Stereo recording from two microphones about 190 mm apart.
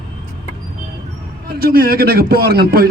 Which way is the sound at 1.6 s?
50° right (ahead or behind).